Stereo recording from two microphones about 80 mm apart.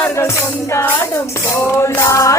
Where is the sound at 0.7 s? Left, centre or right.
Left.